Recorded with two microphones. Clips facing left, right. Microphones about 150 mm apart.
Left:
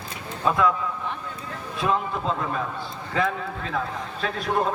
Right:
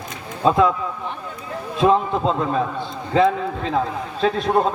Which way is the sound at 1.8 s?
25° right (ahead or behind).